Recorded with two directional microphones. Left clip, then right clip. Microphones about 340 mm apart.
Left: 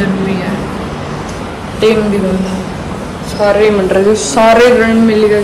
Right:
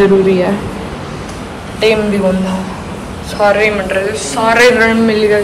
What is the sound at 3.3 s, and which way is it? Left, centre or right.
Speech, centre.